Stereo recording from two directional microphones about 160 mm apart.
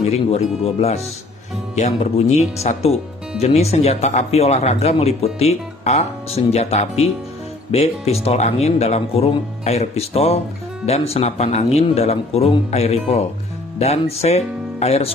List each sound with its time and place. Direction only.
0.0 s speech: 40° left (ahead or behind)